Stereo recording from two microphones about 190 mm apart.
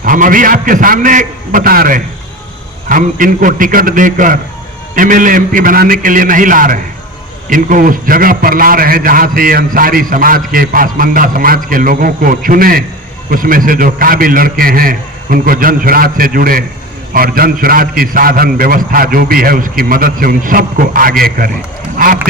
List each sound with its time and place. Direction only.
0.0 s a man's voice: 45° right (ahead or behind)